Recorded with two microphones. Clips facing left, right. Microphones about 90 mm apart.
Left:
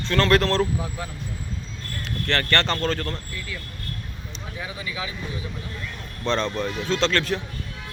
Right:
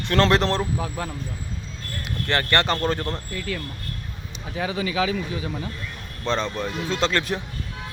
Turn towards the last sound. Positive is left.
turn(degrees=-10)  # may be behind; listen again after turning